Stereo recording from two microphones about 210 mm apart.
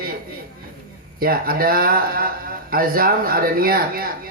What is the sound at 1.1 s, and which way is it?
Speech, 45° right (ahead or behind).